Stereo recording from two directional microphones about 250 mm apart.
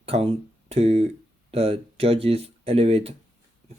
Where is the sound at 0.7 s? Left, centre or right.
Right.